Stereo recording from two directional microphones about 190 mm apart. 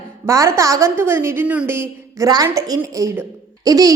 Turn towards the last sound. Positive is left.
turn(degrees=-20)  # may be behind; listen again after turning